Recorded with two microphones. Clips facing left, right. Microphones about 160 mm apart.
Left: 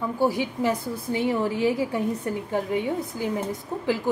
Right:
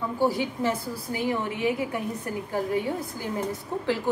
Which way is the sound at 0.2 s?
15° left (ahead or behind).